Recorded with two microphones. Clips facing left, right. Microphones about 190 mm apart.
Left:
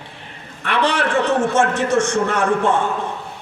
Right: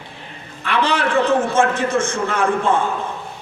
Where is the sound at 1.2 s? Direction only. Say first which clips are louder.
Right 1 dB; 70° left (ahead or behind).